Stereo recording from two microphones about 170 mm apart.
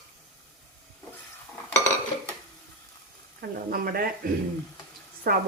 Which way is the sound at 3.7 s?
60° right (ahead or behind).